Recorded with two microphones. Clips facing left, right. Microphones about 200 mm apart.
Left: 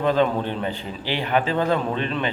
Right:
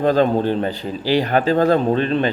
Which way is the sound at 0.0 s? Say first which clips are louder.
Right 5 dB; 40° right (ahead or behind).